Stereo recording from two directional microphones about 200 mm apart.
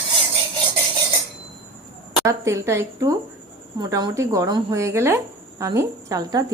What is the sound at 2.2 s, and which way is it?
A woman's voice, 15° right (ahead or behind).